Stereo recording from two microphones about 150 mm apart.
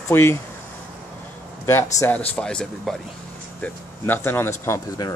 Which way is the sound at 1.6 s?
20° left (ahead or behind).